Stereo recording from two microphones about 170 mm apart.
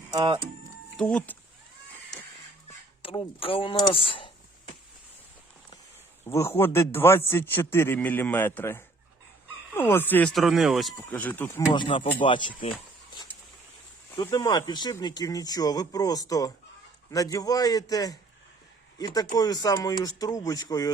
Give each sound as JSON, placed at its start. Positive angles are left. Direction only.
{"t": 0.1, "sound": "speech", "side_deg": -25}
{"t": 0.9, "sound": "speech", "side_deg": 10}
{"t": 3.0, "sound": "speech", "side_deg": 30}
{"t": 6.2, "sound": "speech", "side_deg": 15}
{"t": 10.3, "sound": "speech", "side_deg": 0}
{"t": 11.1, "sound": "speech", "side_deg": 10}
{"t": 11.7, "sound": "speech", "side_deg": 30}
{"t": 14.3, "sound": "speech", "side_deg": 25}